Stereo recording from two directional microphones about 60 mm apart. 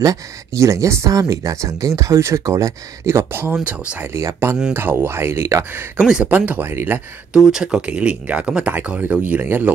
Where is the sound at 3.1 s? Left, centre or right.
Right.